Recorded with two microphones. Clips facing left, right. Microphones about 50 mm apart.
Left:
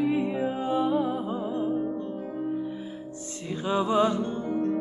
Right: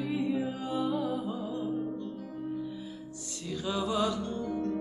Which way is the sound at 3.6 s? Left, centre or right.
Left.